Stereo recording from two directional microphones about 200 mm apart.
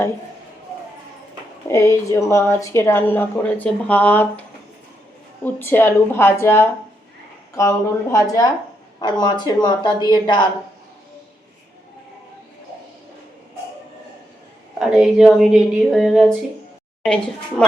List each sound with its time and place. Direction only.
1.6 s a woman's voice: 15° left (ahead or behind)
14.8 s speech: centre (ahead or behind)